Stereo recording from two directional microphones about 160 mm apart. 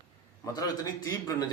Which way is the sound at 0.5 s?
20° left (ahead or behind).